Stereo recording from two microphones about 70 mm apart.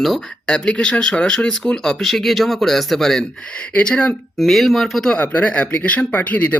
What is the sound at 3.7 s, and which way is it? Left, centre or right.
Speech, centre.